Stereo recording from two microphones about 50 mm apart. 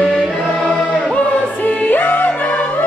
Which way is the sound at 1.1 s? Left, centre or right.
Left.